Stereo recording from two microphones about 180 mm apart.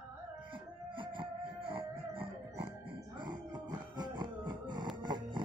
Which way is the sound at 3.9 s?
25° right (ahead or behind).